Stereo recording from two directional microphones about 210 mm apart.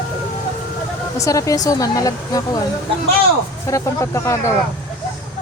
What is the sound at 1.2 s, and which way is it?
Speech, 15° left (ahead or behind).